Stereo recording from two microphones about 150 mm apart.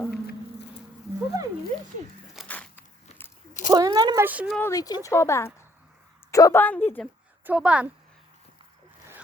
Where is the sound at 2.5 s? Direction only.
10° left (ahead or behind).